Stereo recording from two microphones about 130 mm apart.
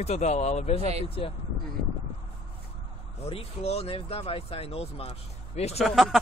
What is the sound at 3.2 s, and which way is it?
Speech, 55° left (ahead or behind).